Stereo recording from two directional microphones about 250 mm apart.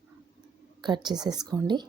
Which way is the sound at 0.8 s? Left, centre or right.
Centre.